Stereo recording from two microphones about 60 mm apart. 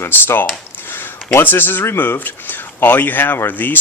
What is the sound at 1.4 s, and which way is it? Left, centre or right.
Speech, left.